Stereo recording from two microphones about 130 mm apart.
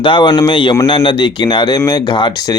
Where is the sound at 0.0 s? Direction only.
40° left (ahead or behind).